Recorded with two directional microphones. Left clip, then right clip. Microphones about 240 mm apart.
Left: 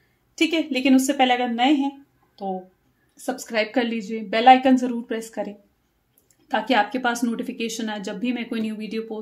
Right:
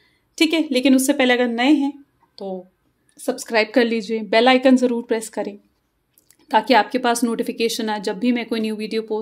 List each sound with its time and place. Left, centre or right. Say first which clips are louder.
0.4 s speech: right 4 dB; right
6.7 s speech: right 2 dB; right